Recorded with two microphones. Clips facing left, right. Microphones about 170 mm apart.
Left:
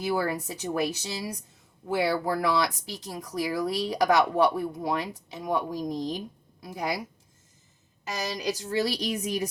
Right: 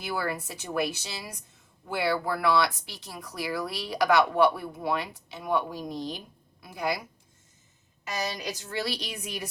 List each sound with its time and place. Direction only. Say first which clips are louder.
0.0 s speech: left 4 dB; 40° left (ahead or behind)
8.4 s speech: left 6 dB; 35° left (ahead or behind)